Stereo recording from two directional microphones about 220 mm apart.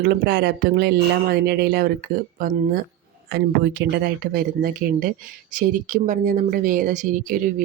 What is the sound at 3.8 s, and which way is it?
Speech, 45° right (ahead or behind).